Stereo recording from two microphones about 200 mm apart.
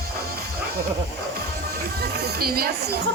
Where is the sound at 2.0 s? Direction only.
50° right (ahead or behind).